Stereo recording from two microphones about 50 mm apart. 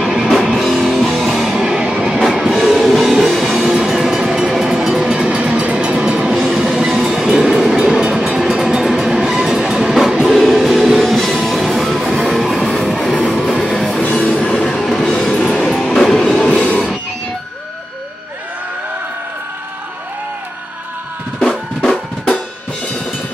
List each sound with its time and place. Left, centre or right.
0.0 s music: centre
0.6 s music: centre
2.4 s music: centre
5.2 s train: right
8.4 s music: centre
14.1 s music: centre
14.8 s music: centre
15.0 s music: centre
16.6 s music: left
21.4 s drum: centre